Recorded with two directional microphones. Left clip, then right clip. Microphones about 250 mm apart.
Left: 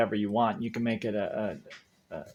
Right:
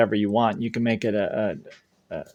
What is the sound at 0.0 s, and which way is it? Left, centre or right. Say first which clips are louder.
Speech: right 6 dB; right.